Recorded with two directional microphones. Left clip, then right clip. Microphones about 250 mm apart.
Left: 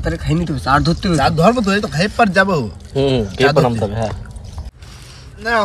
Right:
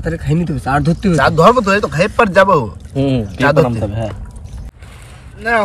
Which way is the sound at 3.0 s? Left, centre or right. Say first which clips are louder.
Left 2 dB; left.